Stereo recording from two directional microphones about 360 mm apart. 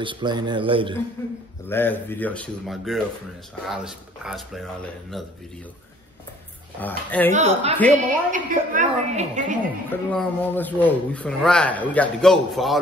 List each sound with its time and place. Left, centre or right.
0.0 s a man's voice: centre
1.2 s a sound: centre
1.7 s speech: centre
6.8 s speech: centre
7.3 s a woman's voice: centre
10.1 s speech: centre